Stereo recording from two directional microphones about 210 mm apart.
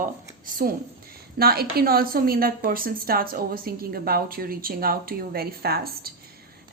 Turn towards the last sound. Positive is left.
turn(degrees=-45)  # may be behind; listen again after turning